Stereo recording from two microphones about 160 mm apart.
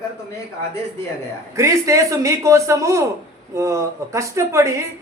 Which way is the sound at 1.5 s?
20° right (ahead or behind).